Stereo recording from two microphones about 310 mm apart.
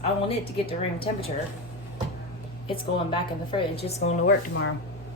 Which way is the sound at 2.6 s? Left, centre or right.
Centre.